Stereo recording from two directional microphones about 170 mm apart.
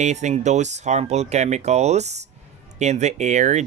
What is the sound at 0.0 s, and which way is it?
Speech, 45° right (ahead or behind).